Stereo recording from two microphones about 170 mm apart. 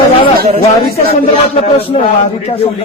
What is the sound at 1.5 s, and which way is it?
Speech, 35° left (ahead or behind).